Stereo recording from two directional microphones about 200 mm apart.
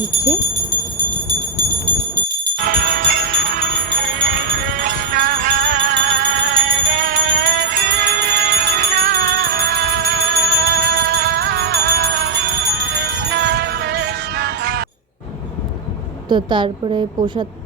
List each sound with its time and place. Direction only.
2.6 s jingle bell: 50° right (ahead or behind)
16.3 s a woman's voice: 25° right (ahead or behind)